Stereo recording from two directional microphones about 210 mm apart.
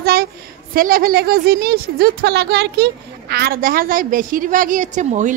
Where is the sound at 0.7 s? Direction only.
45° right (ahead or behind).